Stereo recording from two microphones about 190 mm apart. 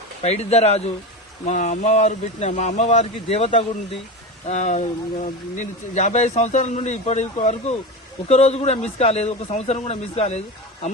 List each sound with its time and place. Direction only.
0.2 s speech: 35° left (ahead or behind)